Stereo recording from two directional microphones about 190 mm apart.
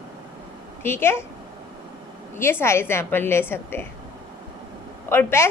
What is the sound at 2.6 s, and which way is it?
A woman's voice, 15° left (ahead or behind).